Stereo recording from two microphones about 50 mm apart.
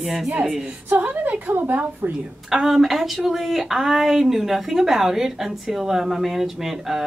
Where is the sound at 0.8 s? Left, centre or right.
Right.